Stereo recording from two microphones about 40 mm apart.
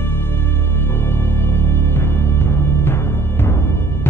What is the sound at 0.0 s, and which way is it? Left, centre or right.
Music, left.